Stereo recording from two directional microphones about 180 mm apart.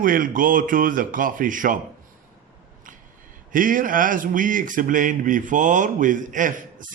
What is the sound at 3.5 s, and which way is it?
A man's voice, 50° right (ahead or behind).